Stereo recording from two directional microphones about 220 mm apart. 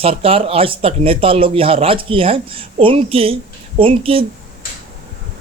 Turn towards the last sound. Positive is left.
turn(degrees=-25)  # may be behind; listen again after turning